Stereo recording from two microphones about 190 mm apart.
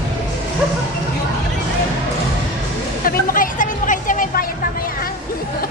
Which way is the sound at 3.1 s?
45° left (ahead or behind).